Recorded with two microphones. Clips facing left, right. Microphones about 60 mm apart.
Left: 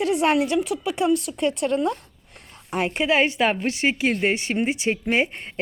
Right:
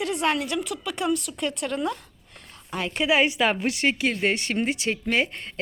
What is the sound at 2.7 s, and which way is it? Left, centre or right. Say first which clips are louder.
Speech: left 5 dB; left.